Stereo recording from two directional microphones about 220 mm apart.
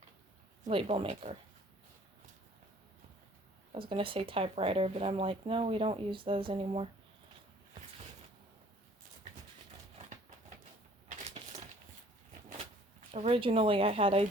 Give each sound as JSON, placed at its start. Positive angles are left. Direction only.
{"t": 0.6, "sound": "speech", "side_deg": -25}
{"t": 3.8, "sound": "speech", "side_deg": -25}
{"t": 13.1, "sound": "speech", "side_deg": -25}